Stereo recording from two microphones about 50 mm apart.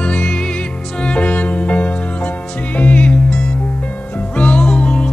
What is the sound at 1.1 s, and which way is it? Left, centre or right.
Music, left.